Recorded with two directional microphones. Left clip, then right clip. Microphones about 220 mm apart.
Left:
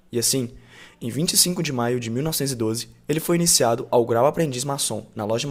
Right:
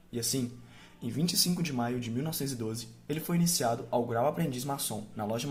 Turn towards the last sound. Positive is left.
turn(degrees=45)  # may be behind; listen again after turning